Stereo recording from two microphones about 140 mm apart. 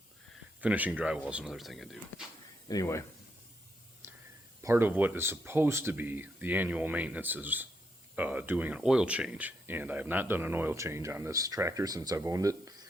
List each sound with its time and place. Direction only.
0.6 s speech: 10° right (ahead or behind)
2.6 s speech: 25° left (ahead or behind)
4.0 s whispering: 20° right (ahead or behind)
4.6 s speech: 15° right (ahead or behind)